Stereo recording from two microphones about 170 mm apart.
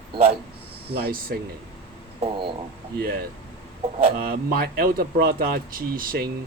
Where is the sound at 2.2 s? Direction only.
30° right (ahead or behind).